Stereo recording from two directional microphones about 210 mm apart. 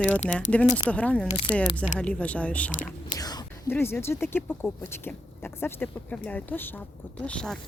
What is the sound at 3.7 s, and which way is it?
Speech, 10° left (ahead or behind).